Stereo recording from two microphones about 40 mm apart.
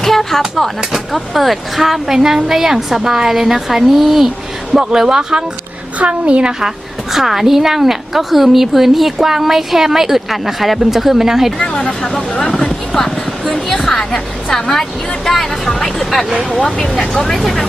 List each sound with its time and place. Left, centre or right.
0.0 s a sound: centre
0.9 s a woman's voice: centre
4.7 s speech: centre
6.0 s speech: right
6.6 s a woman's voice: centre
11.6 s speech: left; by 17.7 s centre